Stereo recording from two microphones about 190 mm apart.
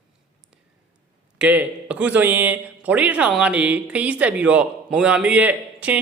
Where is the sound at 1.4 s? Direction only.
5° right (ahead or behind).